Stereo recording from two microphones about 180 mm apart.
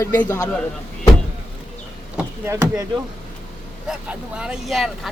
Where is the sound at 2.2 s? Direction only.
15° right (ahead or behind).